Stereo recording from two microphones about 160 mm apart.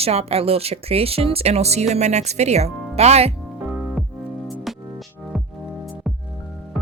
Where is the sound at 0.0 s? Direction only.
40° right (ahead or behind).